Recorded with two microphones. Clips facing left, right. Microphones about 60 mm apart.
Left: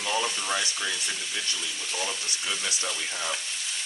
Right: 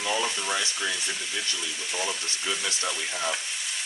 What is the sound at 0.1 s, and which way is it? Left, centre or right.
Frying, centre.